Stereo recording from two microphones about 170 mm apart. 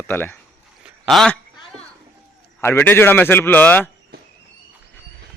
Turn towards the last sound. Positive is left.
turn(degrees=10)  # may be behind; listen again after turning